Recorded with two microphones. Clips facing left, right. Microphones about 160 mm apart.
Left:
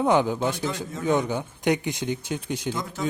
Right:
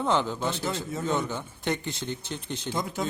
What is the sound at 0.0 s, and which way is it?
Speech, 15° left (ahead or behind).